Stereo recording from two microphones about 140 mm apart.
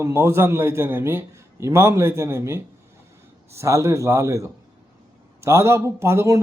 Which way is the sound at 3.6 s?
20° right (ahead or behind).